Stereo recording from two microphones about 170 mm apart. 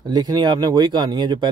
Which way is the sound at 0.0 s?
25° right (ahead or behind).